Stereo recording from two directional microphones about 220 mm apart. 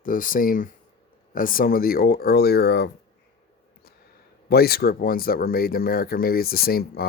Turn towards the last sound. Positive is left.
turn(degrees=45)  # may be behind; listen again after turning